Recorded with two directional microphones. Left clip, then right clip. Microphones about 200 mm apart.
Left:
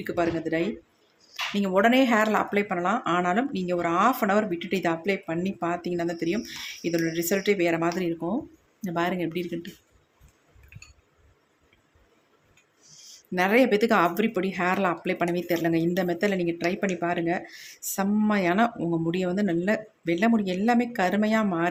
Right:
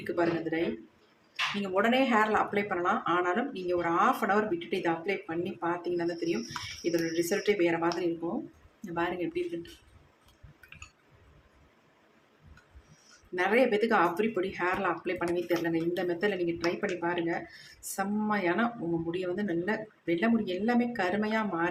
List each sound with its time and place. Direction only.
0.0 s speech: 40° left (ahead or behind)
1.6 s speech: 40° left (ahead or behind)
13.3 s speech: 45° left (ahead or behind)